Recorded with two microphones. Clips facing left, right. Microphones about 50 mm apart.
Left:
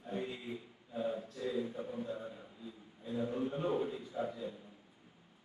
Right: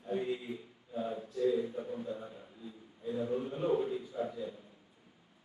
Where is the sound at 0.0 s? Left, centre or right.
Centre.